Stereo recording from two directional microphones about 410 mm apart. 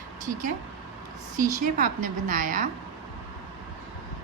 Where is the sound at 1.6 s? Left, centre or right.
Centre.